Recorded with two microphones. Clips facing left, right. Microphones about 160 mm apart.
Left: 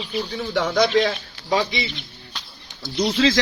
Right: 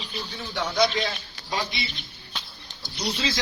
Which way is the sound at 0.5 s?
55° left (ahead or behind).